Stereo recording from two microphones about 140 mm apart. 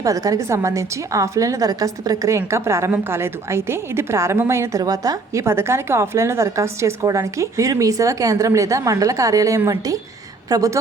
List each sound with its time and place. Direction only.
0.0 s a woman's voice: 25° right (ahead or behind)